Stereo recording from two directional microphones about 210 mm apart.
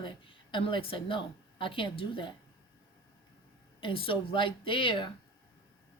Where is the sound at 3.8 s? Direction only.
25° left (ahead or behind).